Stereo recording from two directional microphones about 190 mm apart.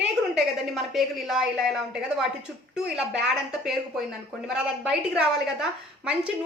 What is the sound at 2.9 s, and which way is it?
A woman's voice, 5° right (ahead or behind).